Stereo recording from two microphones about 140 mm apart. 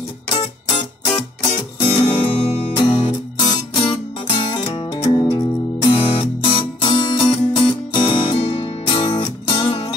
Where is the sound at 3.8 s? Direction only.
40° left (ahead or behind).